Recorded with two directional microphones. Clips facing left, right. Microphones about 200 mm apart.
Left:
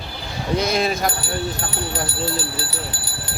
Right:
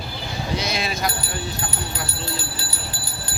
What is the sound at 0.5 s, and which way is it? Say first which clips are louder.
Speech: left 7 dB; 50° left (ahead or behind).